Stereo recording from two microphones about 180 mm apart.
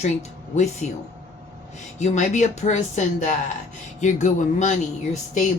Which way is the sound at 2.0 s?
40° left (ahead or behind).